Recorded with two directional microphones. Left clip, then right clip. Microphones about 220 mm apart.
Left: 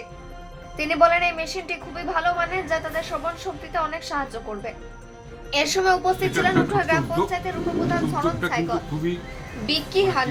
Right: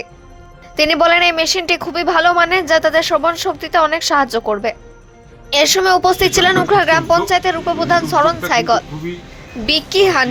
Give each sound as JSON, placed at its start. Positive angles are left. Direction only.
{"t": 0.8, "sound": "a woman's voice", "side_deg": -40}